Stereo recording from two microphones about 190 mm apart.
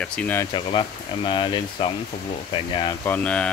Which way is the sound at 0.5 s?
25° left (ahead or behind).